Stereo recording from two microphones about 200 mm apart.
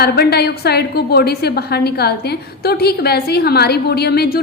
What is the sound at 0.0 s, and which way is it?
A woman's voice, 55° left (ahead or behind).